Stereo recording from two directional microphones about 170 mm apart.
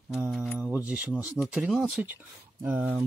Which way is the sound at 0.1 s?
5° right (ahead or behind).